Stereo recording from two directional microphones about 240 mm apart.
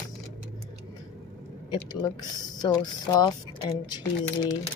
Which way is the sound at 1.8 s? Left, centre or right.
Centre.